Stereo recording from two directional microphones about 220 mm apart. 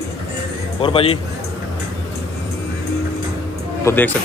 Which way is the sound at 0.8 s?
25° left (ahead or behind).